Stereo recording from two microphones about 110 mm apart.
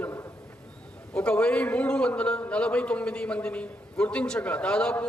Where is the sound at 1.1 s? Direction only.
10° left (ahead or behind).